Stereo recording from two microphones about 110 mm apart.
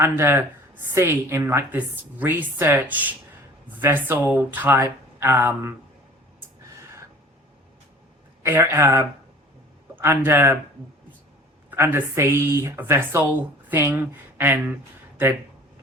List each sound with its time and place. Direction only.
0.0 s a woman's voice: 20° right (ahead or behind)
8.4 s a woman's voice: 25° right (ahead or behind)
11.7 s a woman's voice: 20° right (ahead or behind)